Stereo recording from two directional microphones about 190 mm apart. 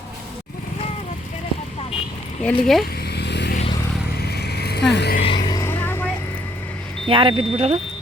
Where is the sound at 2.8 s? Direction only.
55° left (ahead or behind).